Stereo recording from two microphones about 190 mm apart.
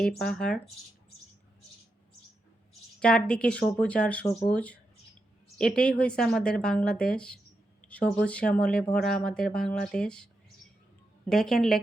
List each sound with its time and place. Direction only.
0.3 s speech: 5° left (ahead or behind)
3.0 s speech: 5° left (ahead or behind)
11.3 s speech: centre (ahead or behind)